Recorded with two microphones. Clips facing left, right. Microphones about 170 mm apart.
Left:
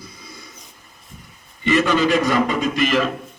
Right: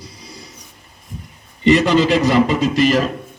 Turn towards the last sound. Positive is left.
turn(degrees=-35)  # may be behind; listen again after turning